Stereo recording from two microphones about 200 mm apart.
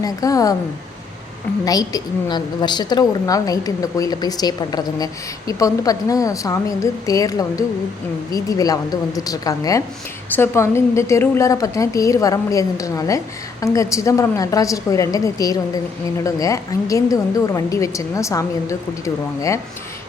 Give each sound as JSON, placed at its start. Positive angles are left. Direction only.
{"t": 0.0, "sound": "a woman's voice", "side_deg": 15}
{"t": 1.6, "sound": "a woman's voice", "side_deg": 20}